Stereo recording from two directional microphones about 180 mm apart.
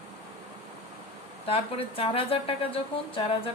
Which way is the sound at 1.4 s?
30° left (ahead or behind).